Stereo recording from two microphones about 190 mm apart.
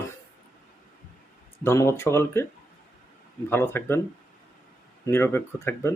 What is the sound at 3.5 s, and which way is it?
Speech, 10° left (ahead or behind).